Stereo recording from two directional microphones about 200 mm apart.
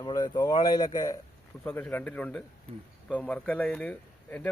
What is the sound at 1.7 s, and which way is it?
A man's voice, 10° left (ahead or behind).